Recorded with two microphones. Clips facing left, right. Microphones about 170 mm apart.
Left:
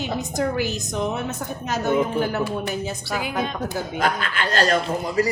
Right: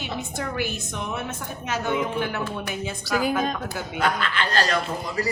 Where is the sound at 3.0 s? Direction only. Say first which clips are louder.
Right 7 dB; 40° right (ahead or behind).